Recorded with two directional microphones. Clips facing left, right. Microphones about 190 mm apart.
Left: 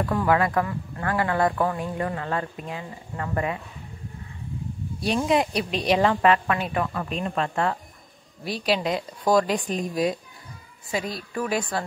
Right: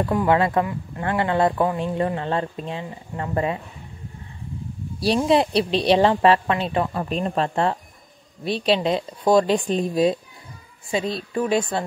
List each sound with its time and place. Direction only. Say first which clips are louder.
0.0 s speech: right 3 dB; 20° right (ahead or behind)
5.0 s a woman's voice: right 4 dB; 30° right (ahead or behind)